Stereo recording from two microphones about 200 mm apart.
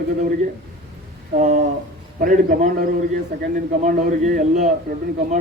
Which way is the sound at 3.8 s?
40° right (ahead or behind).